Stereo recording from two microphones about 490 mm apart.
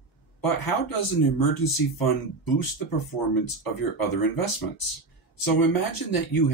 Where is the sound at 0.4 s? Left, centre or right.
Left.